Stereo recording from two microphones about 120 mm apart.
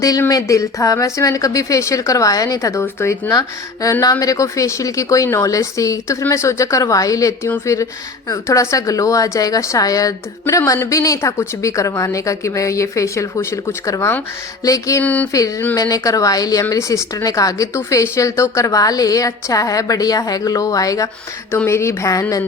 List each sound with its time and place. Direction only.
0.0 s speech: 30° left (ahead or behind)
15.0 s a sound: 15° left (ahead or behind)
15.3 s speech: 30° left (ahead or behind)